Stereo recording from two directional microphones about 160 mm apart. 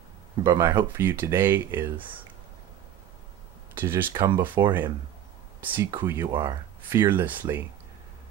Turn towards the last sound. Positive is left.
turn(degrees=-10)  # may be behind; listen again after turning